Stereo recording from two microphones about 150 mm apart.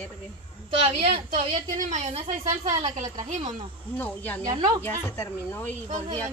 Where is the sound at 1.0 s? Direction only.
45° right (ahead or behind).